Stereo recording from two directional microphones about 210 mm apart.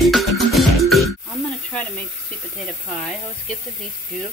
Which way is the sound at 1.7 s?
10° left (ahead or behind).